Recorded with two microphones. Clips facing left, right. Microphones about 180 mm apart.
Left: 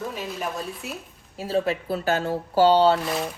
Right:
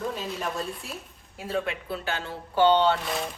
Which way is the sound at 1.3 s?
30° left (ahead or behind).